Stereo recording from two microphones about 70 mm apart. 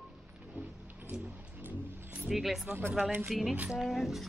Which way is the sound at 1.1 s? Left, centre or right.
Centre.